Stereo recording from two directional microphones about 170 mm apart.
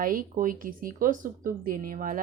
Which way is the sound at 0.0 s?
55° right (ahead or behind).